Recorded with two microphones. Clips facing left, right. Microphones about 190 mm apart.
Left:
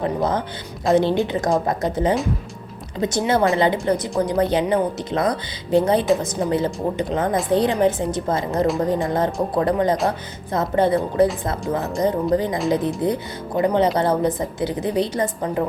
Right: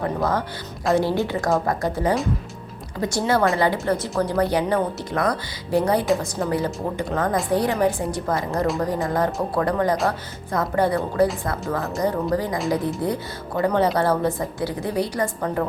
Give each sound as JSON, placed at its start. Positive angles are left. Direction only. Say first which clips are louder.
{"t": 0.0, "sound": "speech", "louder": "left 2 dB", "side_deg": 20}